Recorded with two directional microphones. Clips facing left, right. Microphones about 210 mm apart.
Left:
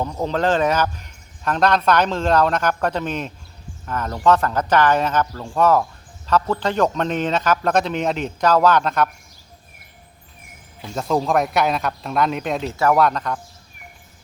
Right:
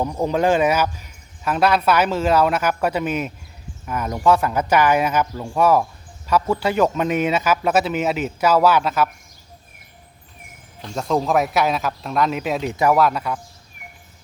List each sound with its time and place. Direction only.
0.0 s speech: 10° right (ahead or behind)
10.8 s speech: centre (ahead or behind)
12.6 s speech: 15° right (ahead or behind)